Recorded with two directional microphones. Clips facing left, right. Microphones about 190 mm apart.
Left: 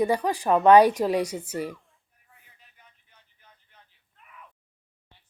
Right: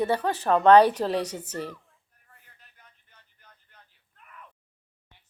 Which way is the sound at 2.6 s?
Centre (ahead or behind).